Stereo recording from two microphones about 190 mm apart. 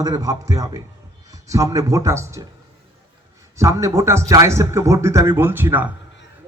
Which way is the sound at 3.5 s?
15° right (ahead or behind).